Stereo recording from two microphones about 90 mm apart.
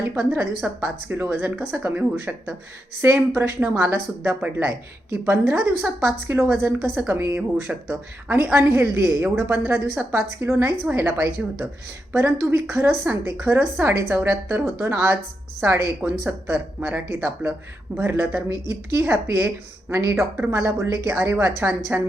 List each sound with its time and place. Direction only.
0.0 s speech: 25° right (ahead or behind)
20.5 s speech: 35° right (ahead or behind)